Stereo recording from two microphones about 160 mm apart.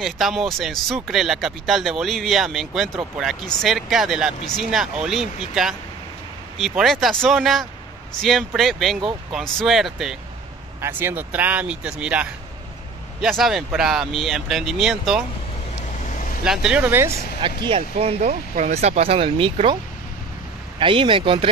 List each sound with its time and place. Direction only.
0.0 s speech: centre (ahead or behind)
10.8 s speech: 15° right (ahead or behind)
16.1 s vehicle: 50° left (ahead or behind)
16.4 s speech: 5° right (ahead or behind)
17.6 s speech: 40° right (ahead or behind)
20.8 s speech: 30° right (ahead or behind)